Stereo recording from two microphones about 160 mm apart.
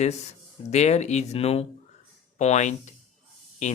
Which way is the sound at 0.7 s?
45° left (ahead or behind).